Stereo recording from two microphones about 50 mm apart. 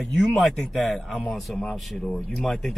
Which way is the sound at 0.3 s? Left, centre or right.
Centre.